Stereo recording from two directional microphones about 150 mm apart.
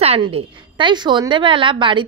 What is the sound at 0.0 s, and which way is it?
A woman's voice, 40° right (ahead or behind).